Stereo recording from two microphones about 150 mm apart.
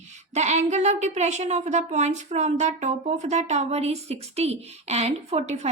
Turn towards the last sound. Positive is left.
turn(degrees=-45)  # may be behind; listen again after turning